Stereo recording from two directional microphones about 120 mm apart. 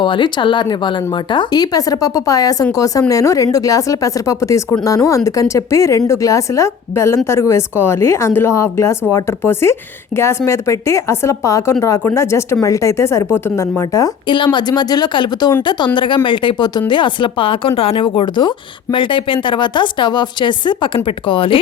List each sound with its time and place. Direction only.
0.0 s speech: 40° left (ahead or behind); by 14.1 s 25° left (ahead or behind)
14.3 s speech: 40° left (ahead or behind)